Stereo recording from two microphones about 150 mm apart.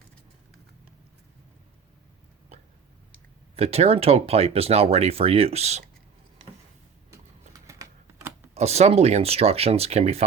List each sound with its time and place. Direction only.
3.5 s speech: 40° right (ahead or behind)
7.7 s typing: 20° right (ahead or behind)
8.5 s speech: 45° right (ahead or behind)